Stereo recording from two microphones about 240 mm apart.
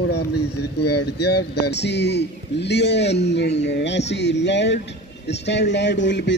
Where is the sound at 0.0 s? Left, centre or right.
Left.